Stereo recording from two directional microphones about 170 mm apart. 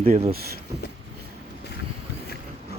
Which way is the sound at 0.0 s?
35° right (ahead or behind).